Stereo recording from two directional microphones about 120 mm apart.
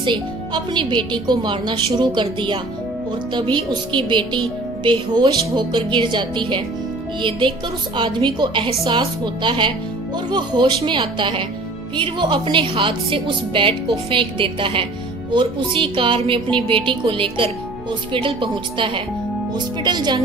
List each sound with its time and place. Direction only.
0.0 s a woman's voice: 40° right (ahead or behind)